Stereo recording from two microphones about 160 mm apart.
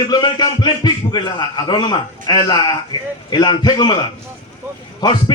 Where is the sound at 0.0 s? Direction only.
25° left (ahead or behind).